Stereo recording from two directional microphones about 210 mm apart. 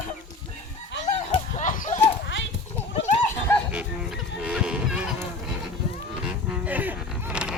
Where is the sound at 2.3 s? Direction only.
65° left (ahead or behind).